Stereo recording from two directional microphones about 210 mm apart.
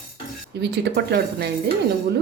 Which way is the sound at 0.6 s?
55° right (ahead or behind).